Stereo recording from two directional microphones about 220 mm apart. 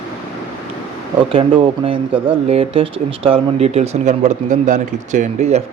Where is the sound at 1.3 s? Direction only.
25° right (ahead or behind).